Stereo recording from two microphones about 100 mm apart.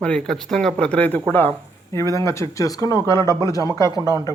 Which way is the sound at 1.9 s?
30° left (ahead or behind).